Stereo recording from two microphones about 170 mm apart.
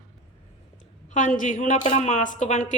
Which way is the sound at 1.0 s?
45° left (ahead or behind).